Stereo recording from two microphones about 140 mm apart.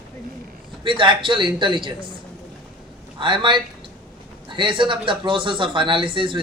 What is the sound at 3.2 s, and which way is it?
Speech, 35° right (ahead or behind).